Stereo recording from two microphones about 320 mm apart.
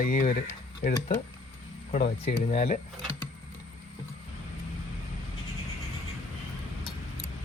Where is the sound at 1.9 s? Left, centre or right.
Left.